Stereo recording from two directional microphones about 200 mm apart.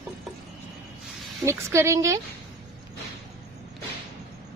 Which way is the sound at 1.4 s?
15° right (ahead or behind).